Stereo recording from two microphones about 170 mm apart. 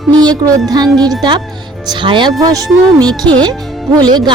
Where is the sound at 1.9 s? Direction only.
30° right (ahead or behind).